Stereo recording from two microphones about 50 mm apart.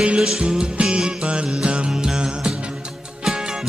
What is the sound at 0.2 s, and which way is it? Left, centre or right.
Music, centre.